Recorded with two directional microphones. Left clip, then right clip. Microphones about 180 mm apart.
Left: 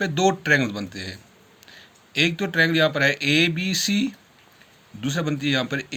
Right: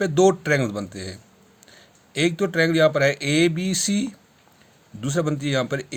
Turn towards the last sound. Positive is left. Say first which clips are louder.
# even
turn(degrees=-65)  # may be behind; listen again after turning